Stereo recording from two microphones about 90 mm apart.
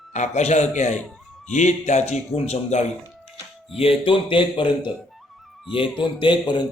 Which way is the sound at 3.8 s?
90° left.